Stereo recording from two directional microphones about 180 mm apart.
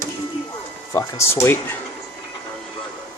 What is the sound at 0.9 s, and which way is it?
Speech, 15° left (ahead or behind).